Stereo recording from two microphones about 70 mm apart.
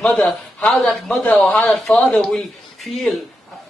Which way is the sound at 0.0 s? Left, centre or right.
Centre.